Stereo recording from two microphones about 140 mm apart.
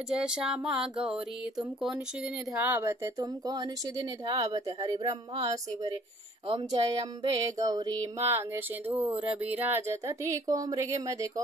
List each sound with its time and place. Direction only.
0.1 s a sound: 5° right (ahead or behind)
2.5 s speech: 20° right (ahead or behind)
3.2 s speech: 30° right (ahead or behind)
5.0 s a sound: 45° right (ahead or behind)
6.4 s speech: 35° right (ahead or behind)
8.4 s speech: 15° right (ahead or behind)